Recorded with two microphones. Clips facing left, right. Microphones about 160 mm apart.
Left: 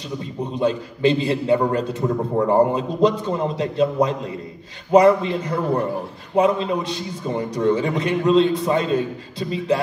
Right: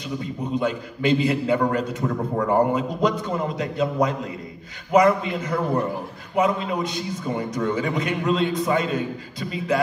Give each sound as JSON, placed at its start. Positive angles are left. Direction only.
{"t": 0.6, "sound": "a man's voice", "side_deg": 30}